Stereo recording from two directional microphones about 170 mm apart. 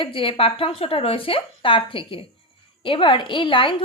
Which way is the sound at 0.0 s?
30° left (ahead or behind).